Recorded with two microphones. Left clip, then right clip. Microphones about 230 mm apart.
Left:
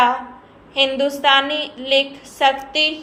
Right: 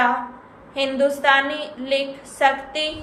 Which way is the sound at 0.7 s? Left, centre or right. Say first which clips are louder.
Left 2 dB; centre.